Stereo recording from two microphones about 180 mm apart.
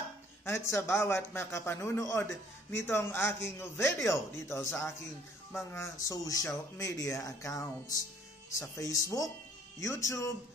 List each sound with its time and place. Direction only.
0.5 s a man's voice: 15° left (ahead or behind)